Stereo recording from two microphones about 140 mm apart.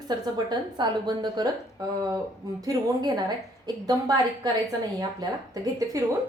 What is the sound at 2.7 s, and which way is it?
A woman's voice, 30° right (ahead or behind).